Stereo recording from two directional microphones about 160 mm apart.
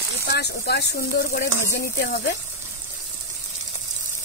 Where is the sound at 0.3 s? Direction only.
90° left.